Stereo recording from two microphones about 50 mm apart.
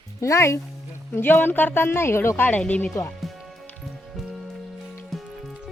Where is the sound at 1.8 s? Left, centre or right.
Left.